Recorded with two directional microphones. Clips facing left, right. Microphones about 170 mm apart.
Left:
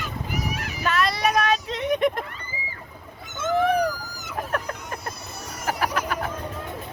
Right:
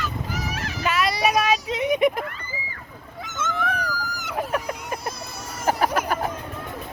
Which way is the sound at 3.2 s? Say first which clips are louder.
Left 1 dB; 90° right.